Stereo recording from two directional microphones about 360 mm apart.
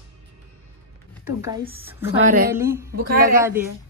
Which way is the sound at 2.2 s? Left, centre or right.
Right.